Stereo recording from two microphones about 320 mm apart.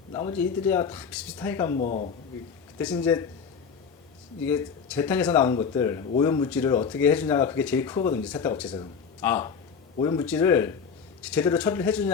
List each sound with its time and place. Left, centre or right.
0.1 s speech: centre
1.8 s speech: left
2.7 s speech: centre
4.4 s speech: centre